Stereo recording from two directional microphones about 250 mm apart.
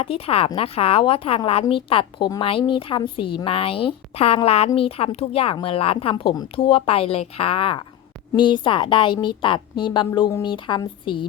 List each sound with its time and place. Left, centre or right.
0.0 s speech: left